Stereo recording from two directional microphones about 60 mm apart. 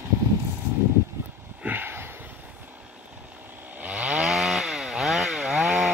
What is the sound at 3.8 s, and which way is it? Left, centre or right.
Chainsaw, right.